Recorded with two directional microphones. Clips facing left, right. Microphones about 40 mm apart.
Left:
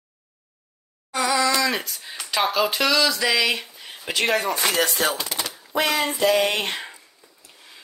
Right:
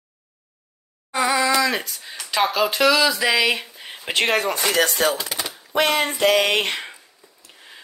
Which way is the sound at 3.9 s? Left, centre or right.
Right.